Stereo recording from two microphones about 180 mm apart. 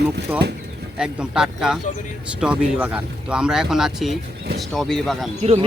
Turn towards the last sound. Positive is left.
turn(degrees=-35)  # may be behind; listen again after turning